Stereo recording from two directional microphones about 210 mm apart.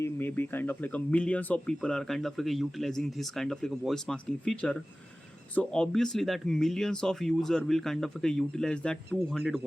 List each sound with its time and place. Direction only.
0.0 s speech: 10° left (ahead or behind)